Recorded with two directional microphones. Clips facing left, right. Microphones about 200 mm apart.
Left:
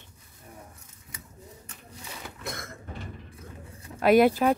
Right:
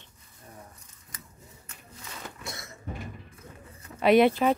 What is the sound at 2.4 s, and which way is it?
Cough, 55° left (ahead or behind).